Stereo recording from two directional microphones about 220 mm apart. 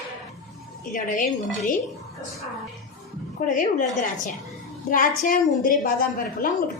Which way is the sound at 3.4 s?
35° left (ahead or behind).